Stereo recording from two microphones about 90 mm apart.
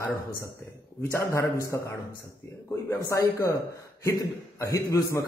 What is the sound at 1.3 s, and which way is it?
Speech, 35° left (ahead or behind).